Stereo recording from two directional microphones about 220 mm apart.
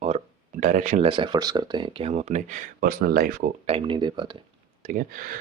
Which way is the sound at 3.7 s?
25° right (ahead or behind).